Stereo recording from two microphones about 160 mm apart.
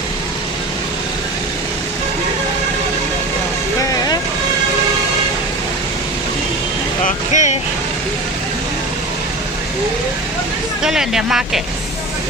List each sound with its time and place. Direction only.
7.1 s vehicle: 50° left (ahead or behind)
10.8 s speech: 5° right (ahead or behind)